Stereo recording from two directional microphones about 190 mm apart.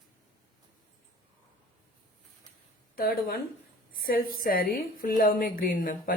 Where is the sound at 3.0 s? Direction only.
50° left (ahead or behind).